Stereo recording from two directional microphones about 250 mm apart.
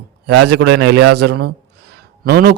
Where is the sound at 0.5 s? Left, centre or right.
Right.